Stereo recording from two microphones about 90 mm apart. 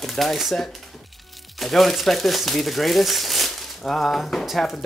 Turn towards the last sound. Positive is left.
turn(degrees=0)  # may be behind; listen again after turning